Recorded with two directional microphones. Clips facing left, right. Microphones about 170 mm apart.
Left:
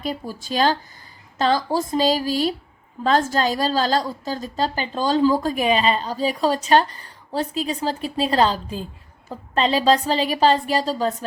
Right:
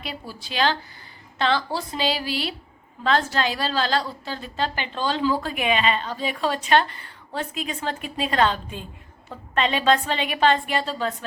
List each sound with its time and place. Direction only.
0.0 s a woman's voice: 45° left (ahead or behind)